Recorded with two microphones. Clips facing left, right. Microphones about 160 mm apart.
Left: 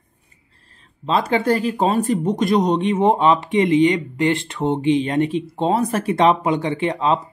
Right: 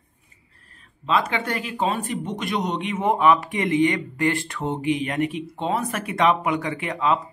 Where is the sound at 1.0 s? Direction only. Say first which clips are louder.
Left 5 dB; 35° left (ahead or behind).